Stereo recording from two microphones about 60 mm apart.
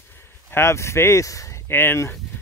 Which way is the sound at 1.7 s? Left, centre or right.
Left.